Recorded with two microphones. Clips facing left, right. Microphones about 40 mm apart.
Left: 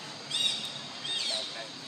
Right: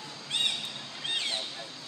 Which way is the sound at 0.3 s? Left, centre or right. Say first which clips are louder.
Right 2 dB; right.